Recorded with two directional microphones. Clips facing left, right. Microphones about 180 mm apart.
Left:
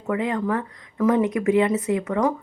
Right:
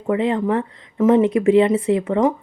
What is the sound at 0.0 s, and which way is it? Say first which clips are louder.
Speech: right 5 dB; 25° right (ahead or behind).